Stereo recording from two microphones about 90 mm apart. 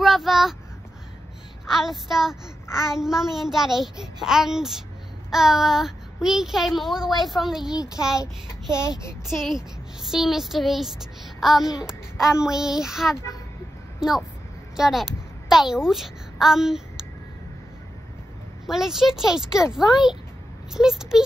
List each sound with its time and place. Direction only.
0.0 s speech: centre (ahead or behind)
1.7 s a child's voice: 5° right (ahead or behind)
7.7 s speech: 45° left (ahead or behind)
9.3 s a child's voice: 5° right (ahead or behind)
18.7 s a child's voice: 5° right (ahead or behind)